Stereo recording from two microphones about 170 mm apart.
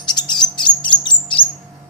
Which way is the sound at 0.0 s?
25° left (ahead or behind).